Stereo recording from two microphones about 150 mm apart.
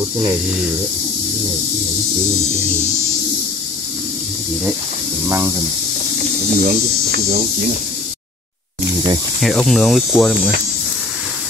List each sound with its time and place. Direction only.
6.5 s speech: 70° right (ahead or behind)
9.4 s speech: centre (ahead or behind)